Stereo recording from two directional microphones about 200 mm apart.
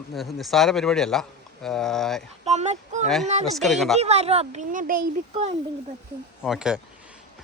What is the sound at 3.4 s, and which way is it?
Speech, centre (ahead or behind).